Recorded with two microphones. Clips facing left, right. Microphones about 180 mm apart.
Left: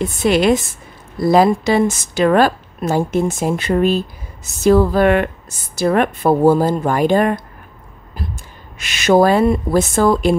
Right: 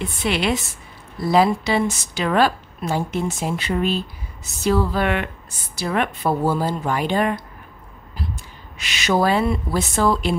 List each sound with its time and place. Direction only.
0.0 s a woman's voice: 45° left (ahead or behind)
8.7 s a woman's voice: 50° left (ahead or behind)